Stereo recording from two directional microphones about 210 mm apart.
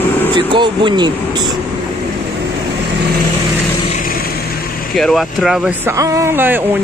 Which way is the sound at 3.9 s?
45° left (ahead or behind).